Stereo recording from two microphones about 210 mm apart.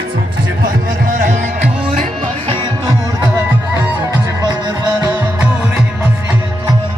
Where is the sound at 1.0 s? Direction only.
40° right (ahead or behind).